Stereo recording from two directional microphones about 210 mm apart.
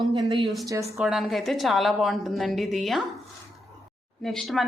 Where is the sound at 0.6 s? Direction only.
15° right (ahead or behind).